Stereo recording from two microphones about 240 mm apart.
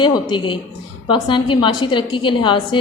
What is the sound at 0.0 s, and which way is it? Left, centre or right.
A woman's voice, centre.